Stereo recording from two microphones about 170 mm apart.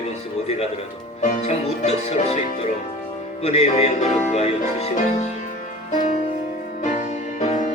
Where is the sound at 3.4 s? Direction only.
35° left (ahead or behind).